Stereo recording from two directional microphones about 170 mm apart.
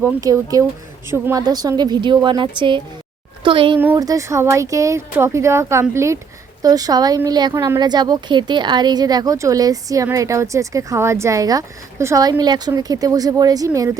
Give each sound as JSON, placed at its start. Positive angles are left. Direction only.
{"t": 0.0, "sound": "a woman's voice", "side_deg": -20}
{"t": 3.8, "sound": "a woman's voice", "side_deg": -15}